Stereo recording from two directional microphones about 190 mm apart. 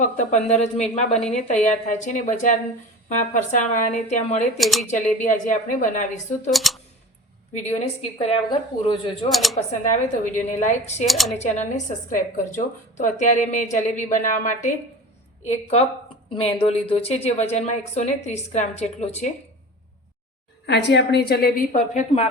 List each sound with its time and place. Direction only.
0.0 s speech: 35° left (ahead or behind)
4.5 s speech: centre (ahead or behind)
4.9 s speech: 40° left (ahead or behind)
6.5 s speech: centre (ahead or behind)
7.5 s speech: 35° left (ahead or behind)
9.3 s speech: centre (ahead or behind)
9.6 s speech: 40° left (ahead or behind)
11.0 s speech: centre (ahead or behind)
12.1 s speech: 40° left (ahead or behind)
20.7 s a woman's voice: 65° left (ahead or behind)
21.7 s speech: 40° left (ahead or behind)